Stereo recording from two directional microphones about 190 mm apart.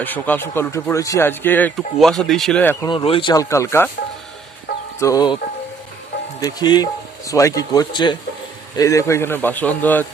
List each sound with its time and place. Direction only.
0.0 s speech: 10° left (ahead or behind)
2.8 s speech: 25° left (ahead or behind)
4.9 s speech: 20° left (ahead or behind)
6.4 s speech: 20° left (ahead or behind)